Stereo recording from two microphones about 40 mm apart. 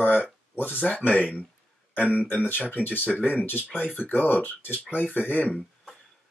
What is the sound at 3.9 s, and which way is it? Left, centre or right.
Speech, left.